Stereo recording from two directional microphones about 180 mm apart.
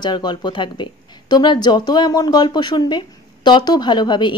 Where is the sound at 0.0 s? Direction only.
25° left (ahead or behind).